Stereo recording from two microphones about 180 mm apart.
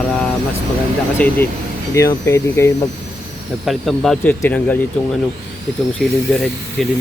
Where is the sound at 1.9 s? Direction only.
15° left (ahead or behind).